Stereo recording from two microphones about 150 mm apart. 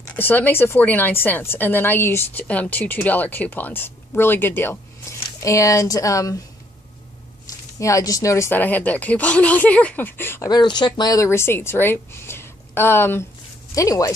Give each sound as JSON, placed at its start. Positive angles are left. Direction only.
{"t": 0.1, "sound": "a woman's voice", "side_deg": 10}
{"t": 7.4, "sound": "a woman's voice", "side_deg": 20}
{"t": 10.5, "sound": "a woman's voice", "side_deg": 30}